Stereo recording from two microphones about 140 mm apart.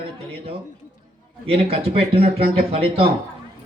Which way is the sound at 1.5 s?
45° right (ahead or behind).